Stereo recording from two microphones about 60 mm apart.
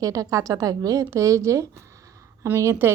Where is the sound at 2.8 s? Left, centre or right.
Right.